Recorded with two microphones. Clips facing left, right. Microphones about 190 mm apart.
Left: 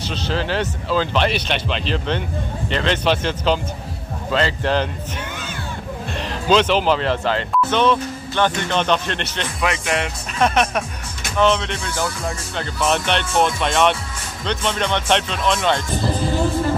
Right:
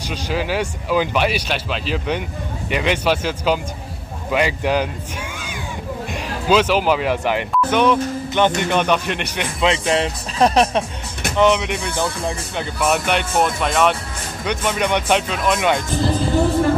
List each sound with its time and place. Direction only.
0.1 s speech: 10° right (ahead or behind)
6.1 s speech: 10° right (ahead or behind)
9.7 s speech: 30° right (ahead or behind)
11.3 s speech: 15° right (ahead or behind)